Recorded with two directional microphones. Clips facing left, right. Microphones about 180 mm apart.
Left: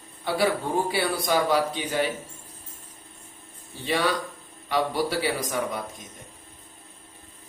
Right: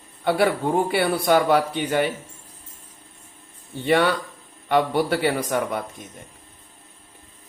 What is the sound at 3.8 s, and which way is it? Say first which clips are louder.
Speech: right 6 dB; 60° right (ahead or behind).